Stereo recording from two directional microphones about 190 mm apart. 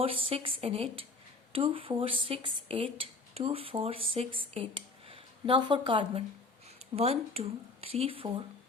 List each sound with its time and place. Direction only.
0.0 s speech: 30° right (ahead or behind)